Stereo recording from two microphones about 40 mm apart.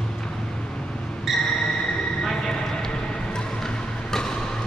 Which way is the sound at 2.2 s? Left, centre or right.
Centre.